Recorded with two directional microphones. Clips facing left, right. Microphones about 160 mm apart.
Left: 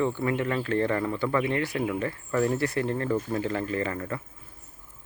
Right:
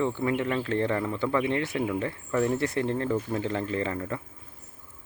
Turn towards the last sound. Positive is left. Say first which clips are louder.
# even
turn(degrees=-10)  # may be behind; listen again after turning